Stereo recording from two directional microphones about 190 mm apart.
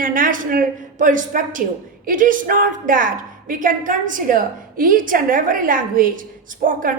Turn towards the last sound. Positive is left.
turn(degrees=-45)  # may be behind; listen again after turning